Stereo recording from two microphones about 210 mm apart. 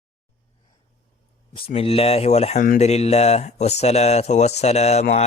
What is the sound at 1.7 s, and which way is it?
Speech, 30° left (ahead or behind).